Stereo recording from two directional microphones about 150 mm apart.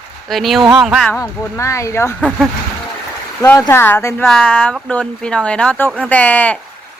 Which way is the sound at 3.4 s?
15° left (ahead or behind).